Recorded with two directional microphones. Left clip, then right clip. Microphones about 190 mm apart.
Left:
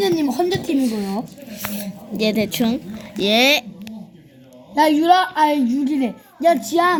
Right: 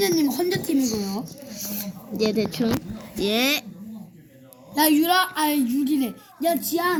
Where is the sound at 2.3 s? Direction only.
55° left (ahead or behind).